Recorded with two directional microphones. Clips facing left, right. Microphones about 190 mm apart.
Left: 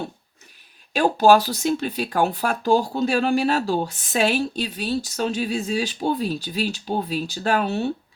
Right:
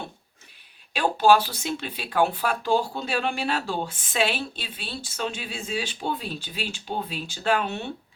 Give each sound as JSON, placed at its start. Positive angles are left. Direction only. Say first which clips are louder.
{"t": 0.9, "sound": "speech", "louder": "left 4 dB", "side_deg": 40}